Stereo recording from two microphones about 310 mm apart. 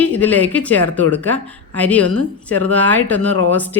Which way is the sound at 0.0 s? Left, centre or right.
Centre.